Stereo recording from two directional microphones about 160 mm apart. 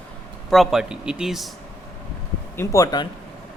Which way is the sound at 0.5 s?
Centre (ahead or behind).